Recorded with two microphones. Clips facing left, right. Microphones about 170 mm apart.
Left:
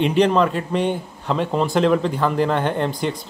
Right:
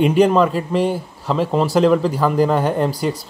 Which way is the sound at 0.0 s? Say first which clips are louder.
Right 3 dB; 5° right (ahead or behind).